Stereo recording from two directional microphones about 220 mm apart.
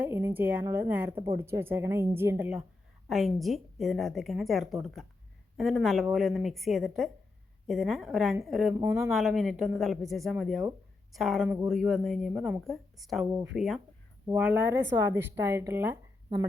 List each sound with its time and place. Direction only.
0.0 s a woman's voice: 10° right (ahead or behind)
1.1 s a woman's voice: 20° right (ahead or behind)
1.4 s a woman's voice: 10° right (ahead or behind)
8.8 s a woman's voice: 15° right (ahead or behind)
9.0 s a woman's voice: centre (ahead or behind)